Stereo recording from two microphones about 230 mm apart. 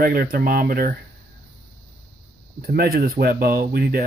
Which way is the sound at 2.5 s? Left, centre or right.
Right.